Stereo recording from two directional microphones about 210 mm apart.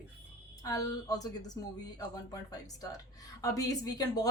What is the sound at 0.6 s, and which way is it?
A woman's voice, 15° left (ahead or behind).